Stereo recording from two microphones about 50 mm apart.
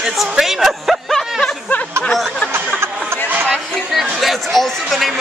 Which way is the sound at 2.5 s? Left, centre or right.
Right.